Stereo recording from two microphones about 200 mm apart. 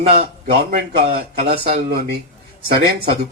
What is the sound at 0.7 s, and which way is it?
Speech, 50° right (ahead or behind).